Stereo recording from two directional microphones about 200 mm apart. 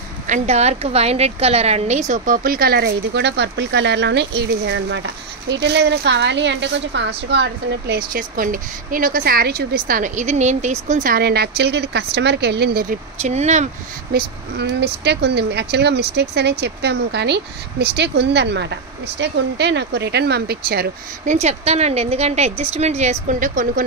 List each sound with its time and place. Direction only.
0.3 s a woman's voice: 35° right (ahead or behind); by 12.8 s 55° right (ahead or behind)
13.2 s a woman's voice: 35° right (ahead or behind)
14.1 s speech: 60° right (ahead or behind)
21.4 s a woman's voice: 35° right (ahead or behind)